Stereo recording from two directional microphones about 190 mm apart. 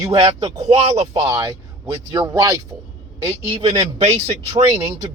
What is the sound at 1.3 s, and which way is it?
Speech, 15° right (ahead or behind).